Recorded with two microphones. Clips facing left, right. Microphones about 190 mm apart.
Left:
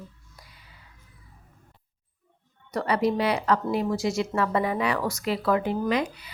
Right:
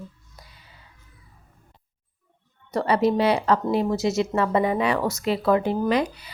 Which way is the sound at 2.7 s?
25° right (ahead or behind).